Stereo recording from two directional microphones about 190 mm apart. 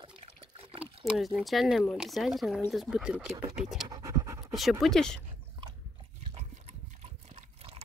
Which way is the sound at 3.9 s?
15° right (ahead or behind).